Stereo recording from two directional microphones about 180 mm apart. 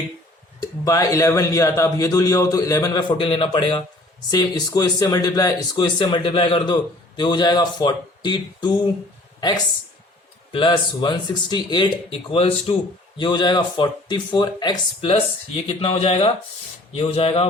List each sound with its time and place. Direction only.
0.6 s a man's voice: 20° left (ahead or behind)
10.5 s a man's voice: 25° left (ahead or behind)